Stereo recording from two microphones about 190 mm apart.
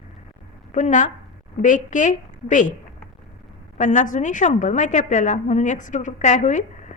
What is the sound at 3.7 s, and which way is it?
A woman's voice, 40° left (ahead or behind).